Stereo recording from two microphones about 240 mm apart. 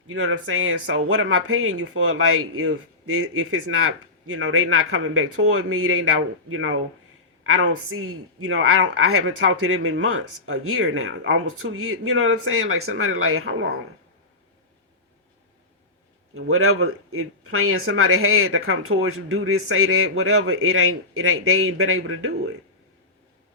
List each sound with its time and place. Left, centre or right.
0.1 s speech: right
16.3 s speech: right